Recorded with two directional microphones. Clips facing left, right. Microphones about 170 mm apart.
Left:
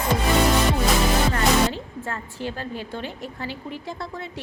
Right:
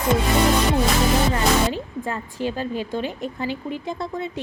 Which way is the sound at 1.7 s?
15° right (ahead or behind).